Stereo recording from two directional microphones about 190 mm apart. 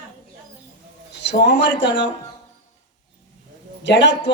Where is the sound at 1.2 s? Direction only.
60° left (ahead or behind).